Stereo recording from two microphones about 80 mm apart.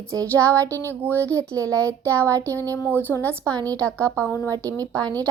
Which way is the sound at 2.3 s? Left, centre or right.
Right.